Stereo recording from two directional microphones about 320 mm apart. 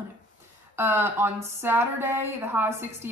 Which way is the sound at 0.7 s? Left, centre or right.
Centre.